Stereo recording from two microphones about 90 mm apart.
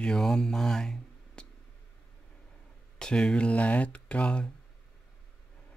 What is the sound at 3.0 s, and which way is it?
Speech, 10° left (ahead or behind).